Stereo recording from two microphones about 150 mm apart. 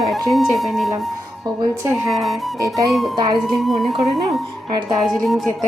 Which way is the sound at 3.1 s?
30° right (ahead or behind).